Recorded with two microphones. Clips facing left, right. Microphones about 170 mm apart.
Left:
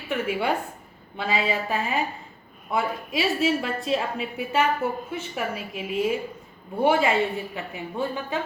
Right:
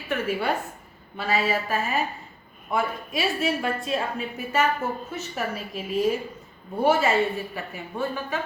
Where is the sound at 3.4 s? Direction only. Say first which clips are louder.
Left 2 dB; 20° left (ahead or behind).